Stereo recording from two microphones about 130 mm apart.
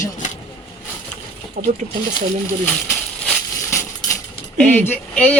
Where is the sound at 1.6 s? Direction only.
90° right.